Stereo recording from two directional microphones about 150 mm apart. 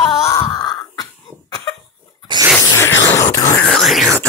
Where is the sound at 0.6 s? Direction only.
30° left (ahead or behind).